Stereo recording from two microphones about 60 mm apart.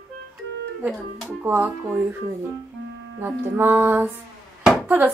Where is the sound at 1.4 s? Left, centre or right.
Right.